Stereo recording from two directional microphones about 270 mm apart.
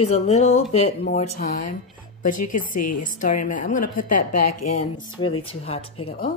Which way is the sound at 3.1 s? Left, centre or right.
Left.